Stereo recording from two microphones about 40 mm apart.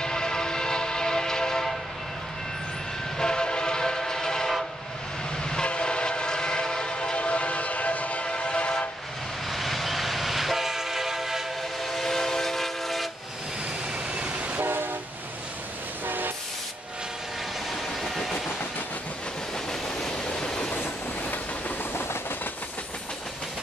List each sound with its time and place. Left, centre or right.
0.0 s train: centre
3.2 s train: centre
7.2 s train: left
8.3 s train: left
9.5 s train: centre
11.8 s train: centre
13.9 s vehicle: right
14.6 s train: right
16.1 s train: right
17.6 s train: centre
19.5 s train: centre
20.7 s train: left
21.9 s train: left